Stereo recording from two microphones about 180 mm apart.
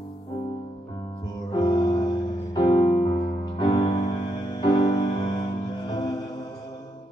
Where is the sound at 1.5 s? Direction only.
25° left (ahead or behind).